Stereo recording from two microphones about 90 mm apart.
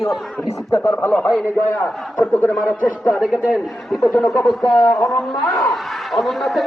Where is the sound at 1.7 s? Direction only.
15° left (ahead or behind).